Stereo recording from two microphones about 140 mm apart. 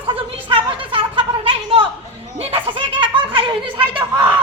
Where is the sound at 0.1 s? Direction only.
40° right (ahead or behind).